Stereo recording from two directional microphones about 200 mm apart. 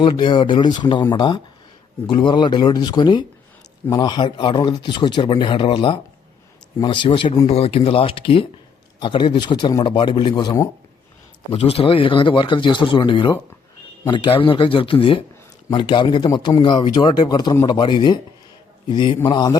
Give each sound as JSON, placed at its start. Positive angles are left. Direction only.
{"t": 0.0, "sound": "a man's voice", "side_deg": 25}